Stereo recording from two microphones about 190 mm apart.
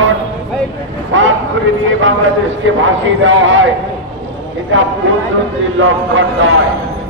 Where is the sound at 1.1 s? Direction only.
85° right.